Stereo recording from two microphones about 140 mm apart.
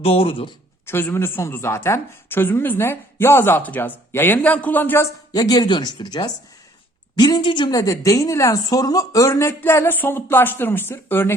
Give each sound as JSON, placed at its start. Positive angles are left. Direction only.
{"t": 0.0, "sound": "speech", "side_deg": 45}
{"t": 0.9, "sound": "a woman's voice", "side_deg": 15}
{"t": 5.3, "sound": "a woman's voice", "side_deg": 30}